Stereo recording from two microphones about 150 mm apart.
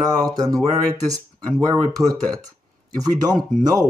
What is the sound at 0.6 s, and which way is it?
Speech, 25° right (ahead or behind).